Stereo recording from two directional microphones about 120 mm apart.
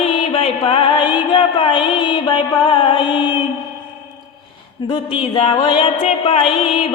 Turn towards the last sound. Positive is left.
turn(degrees=55)  # may be behind; listen again after turning